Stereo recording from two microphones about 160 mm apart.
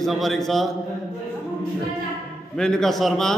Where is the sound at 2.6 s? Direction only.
5° left (ahead or behind).